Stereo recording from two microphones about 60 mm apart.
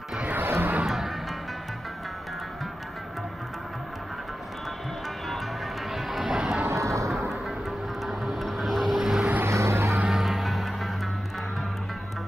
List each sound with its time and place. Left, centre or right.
0.2 s music: right
0.5 s a sound: right
0.8 s music: centre
5.9 s music: centre
6.6 s music: right
8.0 s vehicle: centre
9.5 s music: right
10.0 s music: centre